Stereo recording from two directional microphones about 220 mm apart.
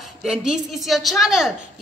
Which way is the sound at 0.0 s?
Centre (ahead or behind).